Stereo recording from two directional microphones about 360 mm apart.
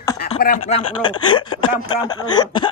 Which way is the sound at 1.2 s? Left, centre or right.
Centre.